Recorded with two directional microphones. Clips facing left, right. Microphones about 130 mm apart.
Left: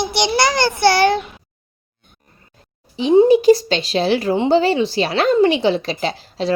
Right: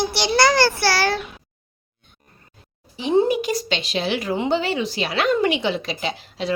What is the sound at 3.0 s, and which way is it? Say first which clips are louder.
Speech: left 7 dB; 20° left (ahead or behind).